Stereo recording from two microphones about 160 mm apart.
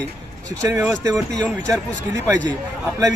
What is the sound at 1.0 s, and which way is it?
A man's voice, 20° right (ahead or behind).